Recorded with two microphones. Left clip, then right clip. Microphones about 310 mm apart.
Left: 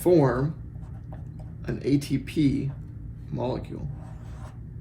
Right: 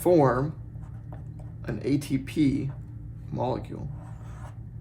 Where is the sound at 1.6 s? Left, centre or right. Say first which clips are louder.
Left 2 dB; right.